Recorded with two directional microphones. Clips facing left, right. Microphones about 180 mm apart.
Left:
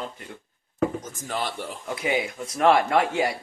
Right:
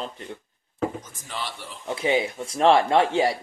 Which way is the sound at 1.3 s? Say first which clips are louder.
Left 5 dB; 50° left (ahead or behind).